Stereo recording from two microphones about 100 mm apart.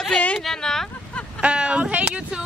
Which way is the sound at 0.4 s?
5° left (ahead or behind).